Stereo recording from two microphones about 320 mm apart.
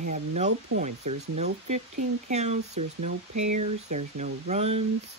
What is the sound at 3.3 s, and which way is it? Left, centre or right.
Speech, right.